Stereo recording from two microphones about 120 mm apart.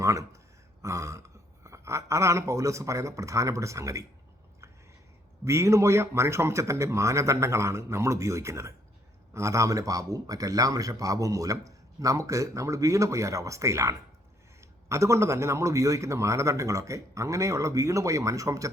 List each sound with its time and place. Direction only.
0.0 s a sound: 25° right (ahead or behind)
0.8 s throat clearing: 25° right (ahead or behind)
1.6 s speech: 25° right (ahead or behind)
5.5 s a man's voice: 25° right (ahead or behind)